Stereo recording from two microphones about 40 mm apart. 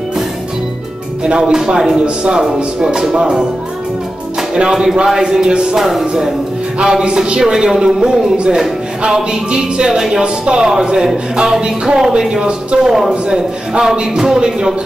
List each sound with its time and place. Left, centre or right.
1.2 s a man's voice: centre
2.0 s music: right
4.6 s a man's voice: centre
5.8 s a man's voice: centre
11.3 s music: centre
12.0 s a man's voice: centre